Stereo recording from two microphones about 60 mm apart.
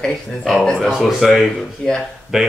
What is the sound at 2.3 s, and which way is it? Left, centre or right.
Speech, centre.